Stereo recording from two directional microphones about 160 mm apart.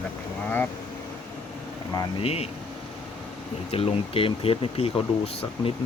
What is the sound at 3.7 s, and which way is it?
Speech, 35° left (ahead or behind).